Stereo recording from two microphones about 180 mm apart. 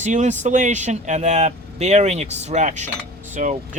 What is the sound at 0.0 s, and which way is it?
Speech, 40° right (ahead or behind).